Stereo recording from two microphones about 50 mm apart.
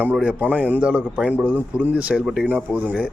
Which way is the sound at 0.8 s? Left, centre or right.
Right.